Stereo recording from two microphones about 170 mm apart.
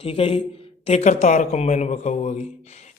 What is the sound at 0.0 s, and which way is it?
A man's voice, 35° left (ahead or behind).